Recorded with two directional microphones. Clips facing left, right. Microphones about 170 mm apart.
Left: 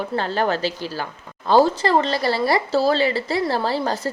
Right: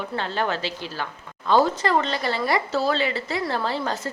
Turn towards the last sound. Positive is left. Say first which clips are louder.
# left 4 dB
turn(degrees=35)  # may be behind; listen again after turning